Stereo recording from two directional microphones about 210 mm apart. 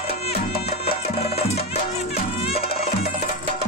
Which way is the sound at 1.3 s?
30° left (ahead or behind).